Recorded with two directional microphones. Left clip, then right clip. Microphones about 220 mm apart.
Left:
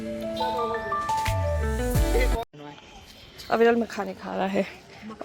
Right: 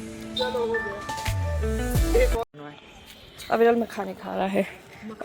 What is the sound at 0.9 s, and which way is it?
Music, centre (ahead or behind).